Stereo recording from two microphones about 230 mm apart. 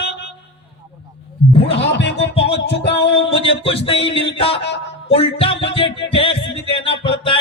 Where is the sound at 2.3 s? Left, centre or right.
Left.